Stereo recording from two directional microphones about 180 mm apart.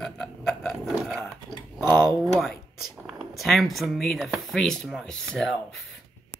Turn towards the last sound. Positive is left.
turn(degrees=5)  # may be behind; listen again after turning